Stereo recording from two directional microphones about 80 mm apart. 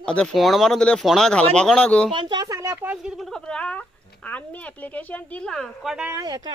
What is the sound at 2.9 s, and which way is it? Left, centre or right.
Speech, centre.